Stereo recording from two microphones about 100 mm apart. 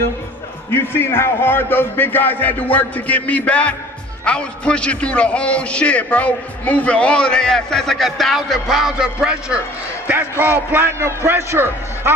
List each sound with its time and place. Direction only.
0.7 s a man's voice: 25° left (ahead or behind); by 9.6 s 10° right (ahead or behind)
10.0 s a man's voice: 20° right (ahead or behind)